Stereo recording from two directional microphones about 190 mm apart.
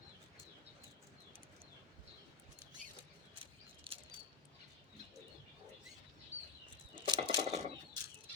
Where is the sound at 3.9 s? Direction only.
25° right (ahead or behind).